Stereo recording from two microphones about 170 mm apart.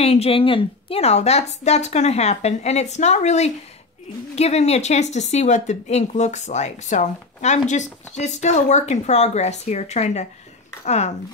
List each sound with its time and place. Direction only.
0.0 s a woman's voice: 35° left (ahead or behind)